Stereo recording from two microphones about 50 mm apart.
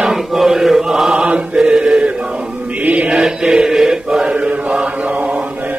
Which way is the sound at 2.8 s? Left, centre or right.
Right.